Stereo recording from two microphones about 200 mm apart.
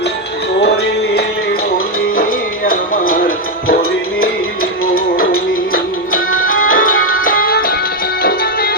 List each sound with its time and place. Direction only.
2.6 s music: 45° left (ahead or behind)
6.1 s music: 90° left
6.5 s music: 45° left (ahead or behind)